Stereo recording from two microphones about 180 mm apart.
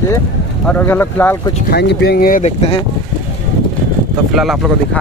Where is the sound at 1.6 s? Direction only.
65° left (ahead or behind).